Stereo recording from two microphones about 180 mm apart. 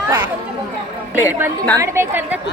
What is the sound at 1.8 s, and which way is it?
Speech, 10° right (ahead or behind).